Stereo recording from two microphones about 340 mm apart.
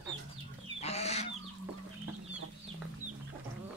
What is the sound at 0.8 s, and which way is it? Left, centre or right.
Goose, centre.